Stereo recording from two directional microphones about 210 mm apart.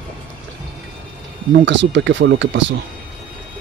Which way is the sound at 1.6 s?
60° right (ahead or behind).